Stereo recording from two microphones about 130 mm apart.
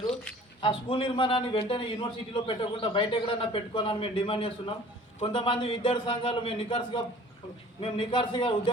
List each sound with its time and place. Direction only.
0.6 s a man's voice: 40° left (ahead or behind)